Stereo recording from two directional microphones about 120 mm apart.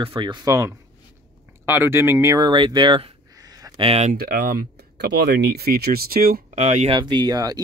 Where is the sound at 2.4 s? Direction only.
40° right (ahead or behind).